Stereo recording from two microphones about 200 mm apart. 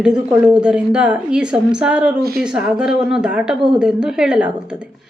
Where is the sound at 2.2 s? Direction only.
50° right (ahead or behind).